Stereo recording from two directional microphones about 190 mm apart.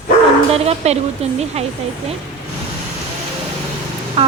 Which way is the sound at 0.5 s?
35° right (ahead or behind).